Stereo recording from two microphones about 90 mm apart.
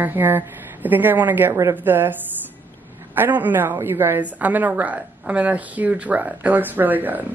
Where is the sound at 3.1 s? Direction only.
20° right (ahead or behind).